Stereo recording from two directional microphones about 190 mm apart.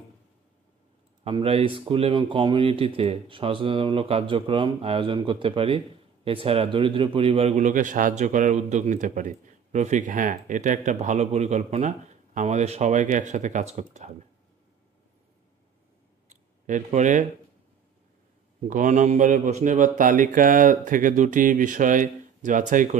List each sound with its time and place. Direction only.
1.2 s a man's voice: 30° right (ahead or behind)
16.3 s a sound: 40° right (ahead or behind)
18.7 s speech: 40° right (ahead or behind)